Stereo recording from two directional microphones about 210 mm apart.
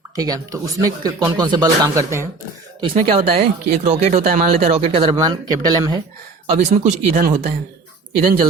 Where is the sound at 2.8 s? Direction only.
30° right (ahead or behind).